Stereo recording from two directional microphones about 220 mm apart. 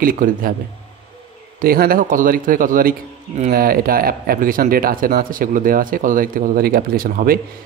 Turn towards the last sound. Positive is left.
turn(degrees=-40)  # may be behind; listen again after turning